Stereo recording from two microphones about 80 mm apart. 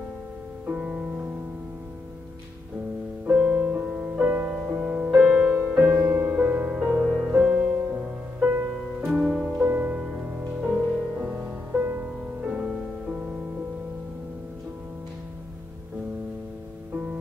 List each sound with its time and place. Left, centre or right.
0.7 s music: centre
3.3 s music: centre
9.6 s music: right
9.9 s music: centre
11.7 s music: right
12.4 s music: centre